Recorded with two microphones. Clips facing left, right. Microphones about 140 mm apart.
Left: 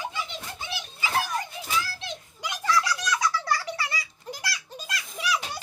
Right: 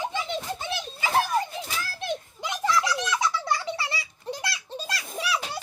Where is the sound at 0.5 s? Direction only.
50° right (ahead or behind).